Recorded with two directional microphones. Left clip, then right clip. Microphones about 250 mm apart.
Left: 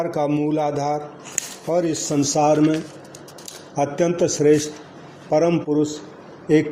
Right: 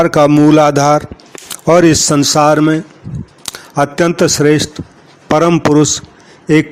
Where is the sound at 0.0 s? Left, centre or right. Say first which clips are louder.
Right 13 dB; right.